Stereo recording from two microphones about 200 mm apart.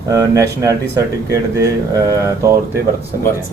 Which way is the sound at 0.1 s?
15° right (ahead or behind).